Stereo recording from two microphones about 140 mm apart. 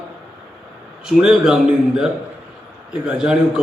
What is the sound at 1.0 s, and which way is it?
Speech, 5° right (ahead or behind).